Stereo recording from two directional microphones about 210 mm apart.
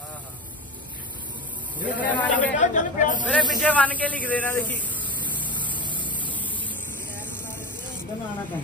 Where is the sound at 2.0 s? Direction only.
5° left (ahead or behind).